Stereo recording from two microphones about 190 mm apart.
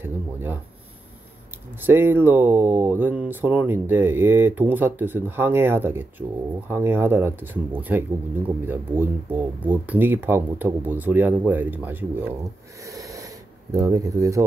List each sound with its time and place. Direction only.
0.0 s speech: 10° right (ahead or behind)
1.8 s speech: 10° right (ahead or behind)
12.8 s a sound: 15° right (ahead or behind)